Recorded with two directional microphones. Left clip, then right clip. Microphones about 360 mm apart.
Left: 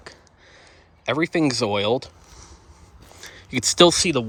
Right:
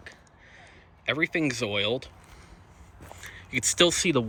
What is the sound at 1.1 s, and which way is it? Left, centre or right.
Speech, centre.